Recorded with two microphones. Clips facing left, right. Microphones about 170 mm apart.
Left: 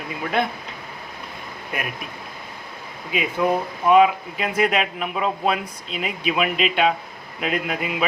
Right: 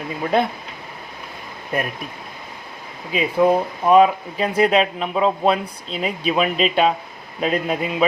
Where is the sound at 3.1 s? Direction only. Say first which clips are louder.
Right 5 dB; 30° right (ahead or behind).